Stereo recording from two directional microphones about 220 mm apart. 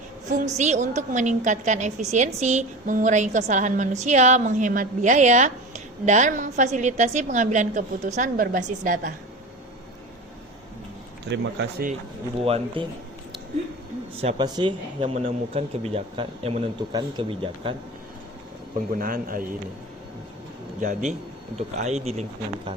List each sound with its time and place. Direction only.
0.3 s a woman's voice: 30° right (ahead or behind)
12.4 s speech: 25° right (ahead or behind)
14.2 s speech: 25° right (ahead or behind)
18.9 s a woman's voice: 40° right (ahead or behind)
20.8 s a woman's voice: 30° right (ahead or behind)